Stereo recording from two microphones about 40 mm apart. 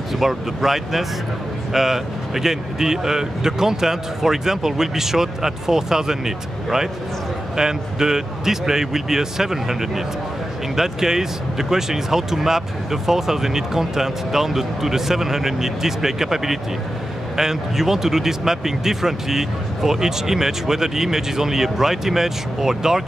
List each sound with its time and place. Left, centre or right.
0.2 s speech: centre